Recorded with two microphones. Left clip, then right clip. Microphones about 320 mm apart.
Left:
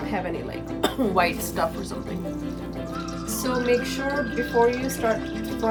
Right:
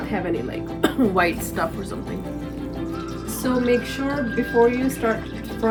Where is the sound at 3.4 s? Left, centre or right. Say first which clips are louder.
Right 2 dB; centre.